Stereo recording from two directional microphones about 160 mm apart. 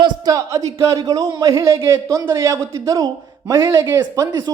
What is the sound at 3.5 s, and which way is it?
A man's voice, 20° right (ahead or behind).